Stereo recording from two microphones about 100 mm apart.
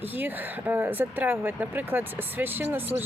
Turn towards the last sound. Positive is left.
turn(degrees=-20)  # may be behind; listen again after turning